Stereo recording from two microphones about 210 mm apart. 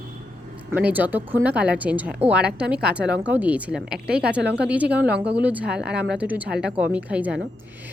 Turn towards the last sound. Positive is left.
turn(degrees=-5)  # may be behind; listen again after turning